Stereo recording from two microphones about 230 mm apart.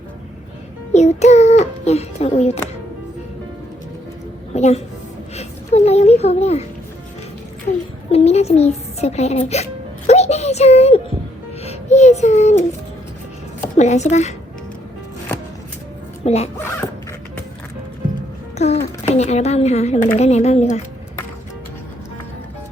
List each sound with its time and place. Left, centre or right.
0.9 s child singing: left
4.5 s a child's voice: left
8.1 s a child's voice: left
11.6 s child singing: left
13.7 s a child's voice: left
16.2 s speech: left
18.5 s music: left
19.0 s a child's voice: left